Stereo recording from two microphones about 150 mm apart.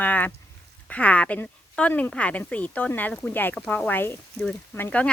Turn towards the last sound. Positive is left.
turn(degrees=10)  # may be behind; listen again after turning